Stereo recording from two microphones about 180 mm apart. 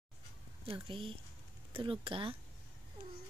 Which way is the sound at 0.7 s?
30° right (ahead or behind).